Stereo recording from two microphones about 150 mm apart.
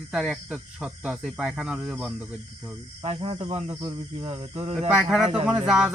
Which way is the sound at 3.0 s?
40° right (ahead or behind).